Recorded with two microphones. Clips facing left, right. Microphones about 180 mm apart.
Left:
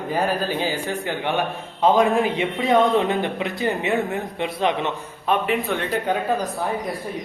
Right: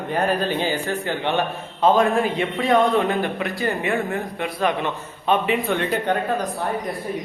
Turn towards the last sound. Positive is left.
turn(degrees=0)  # may be behind; listen again after turning